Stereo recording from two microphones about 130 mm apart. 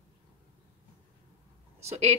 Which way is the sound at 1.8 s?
55° right (ahead or behind).